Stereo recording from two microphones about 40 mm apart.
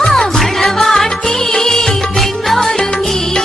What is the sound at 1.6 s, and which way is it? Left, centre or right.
Music of bollywood, centre.